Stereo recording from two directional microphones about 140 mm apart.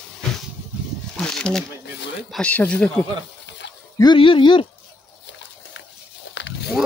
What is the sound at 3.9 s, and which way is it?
Speech, 35° left (ahead or behind).